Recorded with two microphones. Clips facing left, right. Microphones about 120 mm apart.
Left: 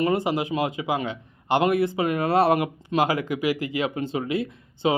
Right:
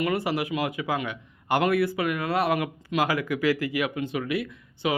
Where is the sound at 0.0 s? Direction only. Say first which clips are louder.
Left 3 dB; 25° left (ahead or behind).